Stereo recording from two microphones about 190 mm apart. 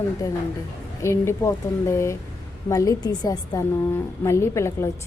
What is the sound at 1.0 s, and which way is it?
A woman's voice, 15° left (ahead or behind).